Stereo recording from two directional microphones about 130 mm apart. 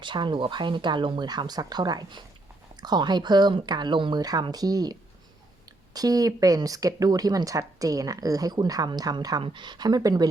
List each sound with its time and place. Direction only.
0.0 s speech: 35° right (ahead or behind)